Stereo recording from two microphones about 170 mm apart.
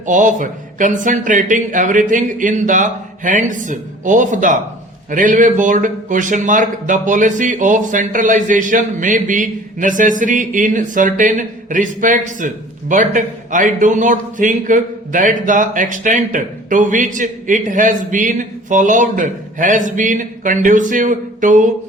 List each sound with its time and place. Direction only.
0.0 s a man's voice: 50° right (ahead or behind)